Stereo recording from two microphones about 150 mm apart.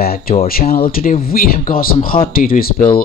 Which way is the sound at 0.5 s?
80° left.